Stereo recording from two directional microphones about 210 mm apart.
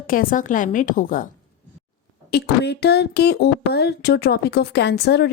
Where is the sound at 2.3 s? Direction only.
50° left (ahead or behind).